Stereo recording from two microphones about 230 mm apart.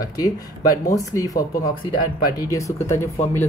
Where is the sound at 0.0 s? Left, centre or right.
Centre.